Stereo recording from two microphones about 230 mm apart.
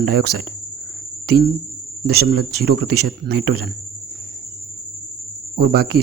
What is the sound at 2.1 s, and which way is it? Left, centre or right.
Speech, right.